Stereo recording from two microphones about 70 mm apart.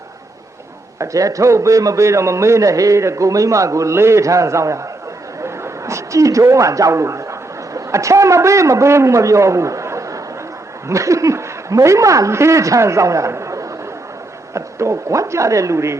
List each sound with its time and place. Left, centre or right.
0.9 s a man's voice: right
5.4 s a sound: right
10.8 s a man's voice: right